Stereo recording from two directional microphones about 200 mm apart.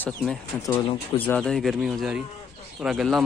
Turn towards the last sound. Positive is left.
turn(degrees=0)  # may be behind; listen again after turning